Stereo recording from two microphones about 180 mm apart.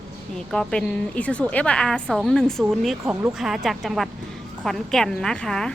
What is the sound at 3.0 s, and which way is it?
Speech, 15° right (ahead or behind).